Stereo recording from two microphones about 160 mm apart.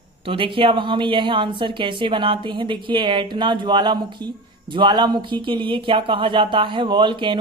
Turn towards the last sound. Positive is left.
turn(degrees=-30)  # may be behind; listen again after turning